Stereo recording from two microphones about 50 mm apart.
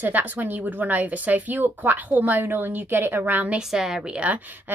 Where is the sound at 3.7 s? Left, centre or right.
Centre.